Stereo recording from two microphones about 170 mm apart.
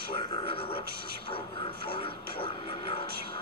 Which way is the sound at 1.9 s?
30° left (ahead or behind).